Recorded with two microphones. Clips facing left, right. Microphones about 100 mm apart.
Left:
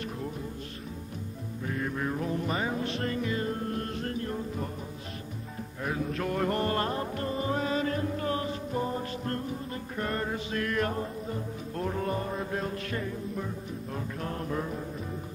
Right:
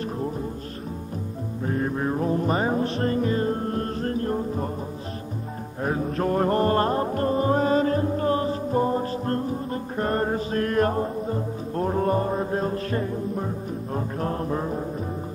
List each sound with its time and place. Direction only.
1.7 s music: 35° right (ahead or behind)
5.8 s music: 40° right (ahead or behind)